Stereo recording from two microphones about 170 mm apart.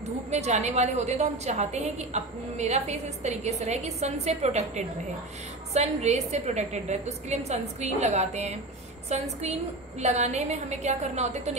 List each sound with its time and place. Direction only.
0.3 s a woman's voice: 40° right (ahead or behind)